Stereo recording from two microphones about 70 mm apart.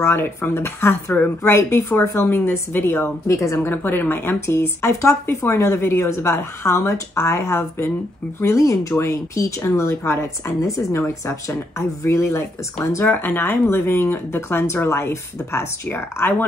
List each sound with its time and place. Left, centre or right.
0.0 s speech: left
1.4 s speech: left
3.3 s a woman's voice: left
3.6 s a woman's voice: left
13.0 s speech: left